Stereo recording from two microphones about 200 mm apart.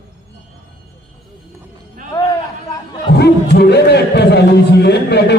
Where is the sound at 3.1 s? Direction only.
55° left (ahead or behind).